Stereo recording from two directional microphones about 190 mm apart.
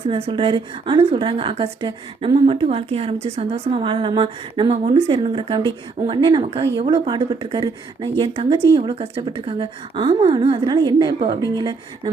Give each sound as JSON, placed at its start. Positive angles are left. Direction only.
{"t": 0.1, "sound": "a woman's voice", "side_deg": -30}